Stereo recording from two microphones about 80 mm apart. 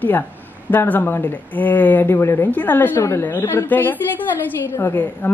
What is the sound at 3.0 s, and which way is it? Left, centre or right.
A woman's voice, left.